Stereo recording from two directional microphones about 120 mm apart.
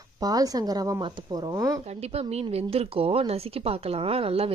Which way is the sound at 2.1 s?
60° right (ahead or behind).